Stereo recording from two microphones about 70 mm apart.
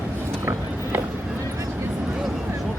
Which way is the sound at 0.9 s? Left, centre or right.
Right.